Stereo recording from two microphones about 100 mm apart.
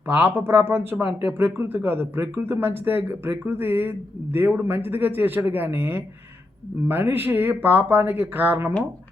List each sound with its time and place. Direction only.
0.1 s speech: 20° right (ahead or behind)